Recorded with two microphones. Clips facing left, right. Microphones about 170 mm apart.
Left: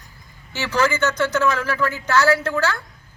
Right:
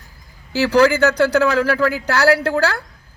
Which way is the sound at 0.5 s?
35° right (ahead or behind).